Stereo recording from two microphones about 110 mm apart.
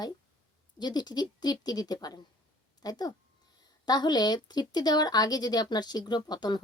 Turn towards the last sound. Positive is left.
turn(degrees=40)  # may be behind; listen again after turning